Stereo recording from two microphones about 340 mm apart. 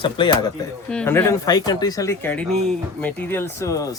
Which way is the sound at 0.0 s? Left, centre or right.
Centre.